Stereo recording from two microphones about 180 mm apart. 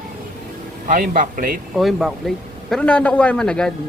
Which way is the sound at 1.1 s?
50° right (ahead or behind).